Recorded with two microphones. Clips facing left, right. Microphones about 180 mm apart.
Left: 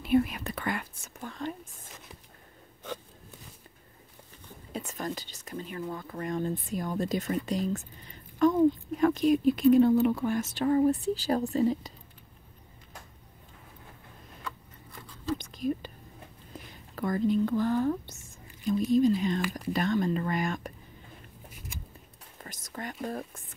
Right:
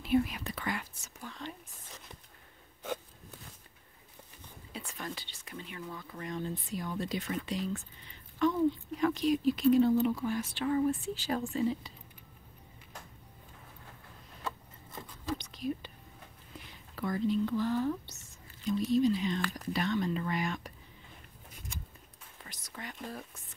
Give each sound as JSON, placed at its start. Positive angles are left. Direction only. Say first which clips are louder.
{"t": 0.0, "sound": "whispering", "louder": "left 4 dB", "side_deg": 55}
{"t": 4.7, "sound": "speech", "louder": "left 7 dB", "side_deg": 40}
{"t": 14.4, "sound": "a sound", "louder": "right 2 dB", "side_deg": -20}
{"t": 15.3, "sound": "whispering", "louder": "left 5 dB", "side_deg": 50}
{"t": 16.5, "sound": "speech", "louder": "left 5 dB", "side_deg": 50}
{"t": 22.4, "sound": "whispering", "louder": "left 6 dB", "side_deg": 45}
{"t": 23.0, "sound": "speech", "louder": "left 9 dB", "side_deg": 50}